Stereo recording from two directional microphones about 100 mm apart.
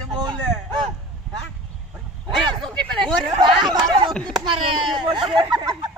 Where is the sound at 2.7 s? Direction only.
10° left (ahead or behind).